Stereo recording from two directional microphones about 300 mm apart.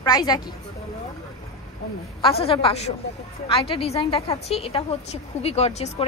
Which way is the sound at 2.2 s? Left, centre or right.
Centre.